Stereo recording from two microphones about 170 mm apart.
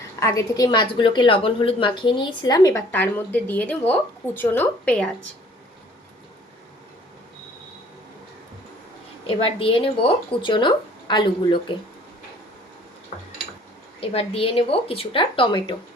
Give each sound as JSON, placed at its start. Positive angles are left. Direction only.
{"t": 0.2, "sound": "a woman's voice", "side_deg": 20}
{"t": 2.9, "sound": "speech", "side_deg": 10}
{"t": 9.2, "sound": "speech", "side_deg": 30}
{"t": 14.0, "sound": "speech", "side_deg": 35}